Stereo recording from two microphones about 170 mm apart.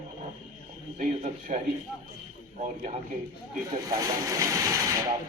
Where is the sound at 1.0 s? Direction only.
45° right (ahead or behind).